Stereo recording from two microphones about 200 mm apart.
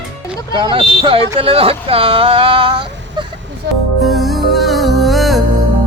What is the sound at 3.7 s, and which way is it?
Music, 55° right (ahead or behind).